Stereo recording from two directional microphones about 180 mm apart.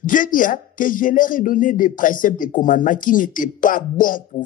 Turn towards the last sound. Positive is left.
turn(degrees=50)  # may be behind; listen again after turning